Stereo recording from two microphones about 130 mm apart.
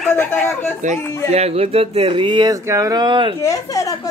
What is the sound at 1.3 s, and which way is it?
Speech, 50° right (ahead or behind).